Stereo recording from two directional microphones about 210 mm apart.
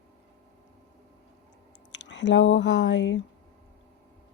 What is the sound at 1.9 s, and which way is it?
Speech, 60° left (ahead or behind).